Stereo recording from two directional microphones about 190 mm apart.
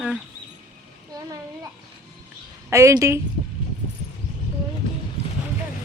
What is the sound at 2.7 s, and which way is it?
Speech, 15° right (ahead or behind).